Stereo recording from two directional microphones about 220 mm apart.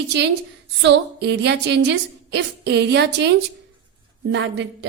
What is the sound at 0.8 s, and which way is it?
A woman's voice, 50° right (ahead or behind).